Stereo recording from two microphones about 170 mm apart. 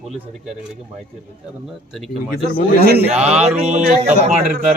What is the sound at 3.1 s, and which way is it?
Speech, 40° right (ahead or behind).